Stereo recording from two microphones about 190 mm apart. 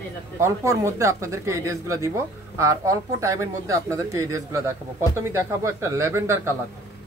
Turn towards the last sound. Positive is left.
turn(degrees=-15)  # may be behind; listen again after turning